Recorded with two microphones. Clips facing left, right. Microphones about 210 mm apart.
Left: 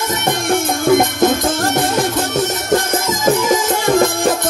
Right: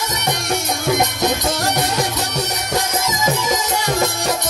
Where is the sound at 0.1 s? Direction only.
50° left (ahead or behind).